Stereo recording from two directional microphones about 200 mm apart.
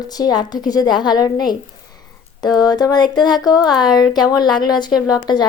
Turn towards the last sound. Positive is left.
turn(degrees=20)  # may be behind; listen again after turning